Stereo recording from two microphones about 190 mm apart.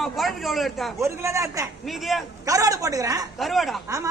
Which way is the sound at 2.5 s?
15° right (ahead or behind).